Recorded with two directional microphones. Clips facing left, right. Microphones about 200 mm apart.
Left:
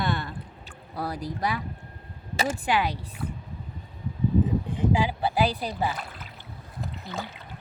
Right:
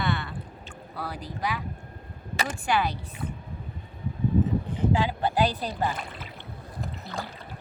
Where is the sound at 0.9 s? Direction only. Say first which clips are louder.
Left 4 dB; 40° left (ahead or behind).